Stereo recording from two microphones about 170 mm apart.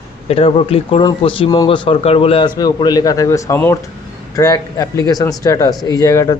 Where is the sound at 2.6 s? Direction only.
20° left (ahead or behind).